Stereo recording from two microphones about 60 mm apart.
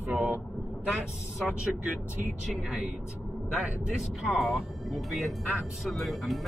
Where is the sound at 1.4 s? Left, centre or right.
Centre.